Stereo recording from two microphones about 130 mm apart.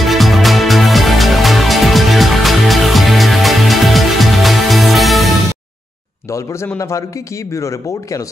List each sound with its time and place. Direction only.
0.0 s music: centre (ahead or behind)
7.5 s speech: 25° left (ahead or behind)